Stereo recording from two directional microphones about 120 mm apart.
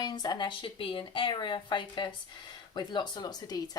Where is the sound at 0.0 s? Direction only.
35° left (ahead or behind).